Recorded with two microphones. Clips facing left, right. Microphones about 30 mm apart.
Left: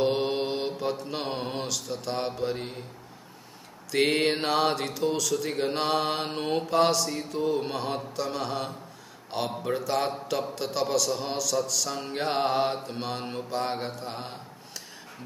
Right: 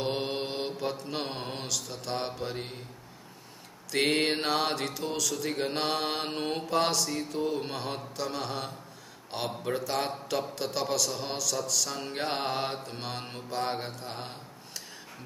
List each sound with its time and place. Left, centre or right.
0.0 s mantra: centre
3.9 s speech: centre